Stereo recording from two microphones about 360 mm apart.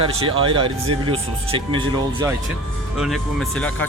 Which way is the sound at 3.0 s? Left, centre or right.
Centre.